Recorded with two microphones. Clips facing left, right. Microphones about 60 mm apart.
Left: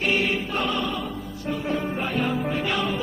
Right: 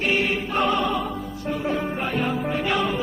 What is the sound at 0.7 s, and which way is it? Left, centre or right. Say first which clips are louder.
Music: right 4 dB; right.